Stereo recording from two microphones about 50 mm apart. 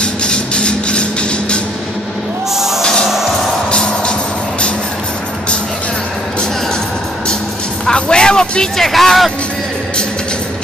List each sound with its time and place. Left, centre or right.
0.0 s a sound: centre
2.5 s music: centre
2.8 s music: centre
7.8 s music: centre
8.8 s speech: centre